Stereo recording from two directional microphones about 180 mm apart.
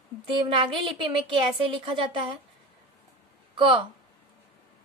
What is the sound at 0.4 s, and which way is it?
A woman's voice, 25° right (ahead or behind).